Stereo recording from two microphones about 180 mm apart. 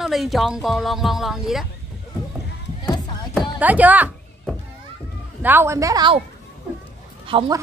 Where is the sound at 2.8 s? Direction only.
25° left (ahead or behind).